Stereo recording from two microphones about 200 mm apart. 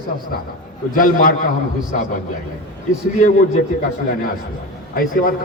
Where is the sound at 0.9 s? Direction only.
45° left (ahead or behind).